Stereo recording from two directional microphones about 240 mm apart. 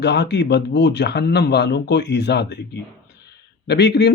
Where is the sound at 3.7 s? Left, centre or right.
Left.